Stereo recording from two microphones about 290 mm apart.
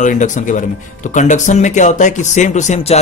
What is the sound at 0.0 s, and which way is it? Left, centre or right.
Speech, left.